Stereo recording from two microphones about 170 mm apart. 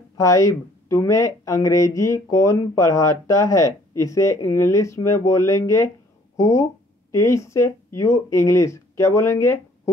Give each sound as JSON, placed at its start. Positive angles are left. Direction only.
{"t": 0.2, "sound": "speech", "side_deg": 20}